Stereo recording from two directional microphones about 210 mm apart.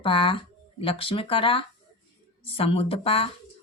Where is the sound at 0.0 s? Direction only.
25° left (ahead or behind).